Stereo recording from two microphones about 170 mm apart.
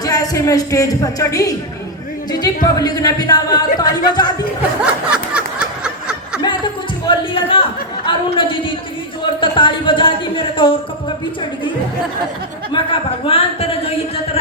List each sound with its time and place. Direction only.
0.0 s speech: 20° left (ahead or behind)
2.7 s speech: 20° left (ahead or behind)
4.8 s snicker: 5° right (ahead or behind)
7.0 s speech: 30° left (ahead or behind)
12.7 s speech: 30° left (ahead or behind)